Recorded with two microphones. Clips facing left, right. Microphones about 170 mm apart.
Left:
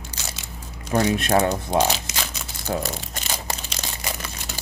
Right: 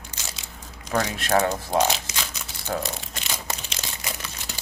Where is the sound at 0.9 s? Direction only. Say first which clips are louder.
Left 3 dB; 20° left (ahead or behind).